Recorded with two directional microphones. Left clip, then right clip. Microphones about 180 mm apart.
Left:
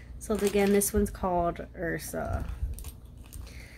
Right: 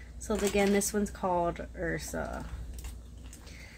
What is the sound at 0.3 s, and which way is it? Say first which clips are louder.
Speech: left 2 dB; 15° left (ahead or behind).